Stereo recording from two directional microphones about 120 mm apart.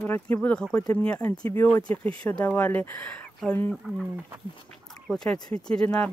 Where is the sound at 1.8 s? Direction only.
10° left (ahead or behind).